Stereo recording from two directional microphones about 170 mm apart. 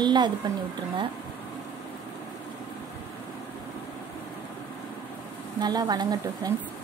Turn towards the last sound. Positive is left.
turn(degrees=-25)  # may be behind; listen again after turning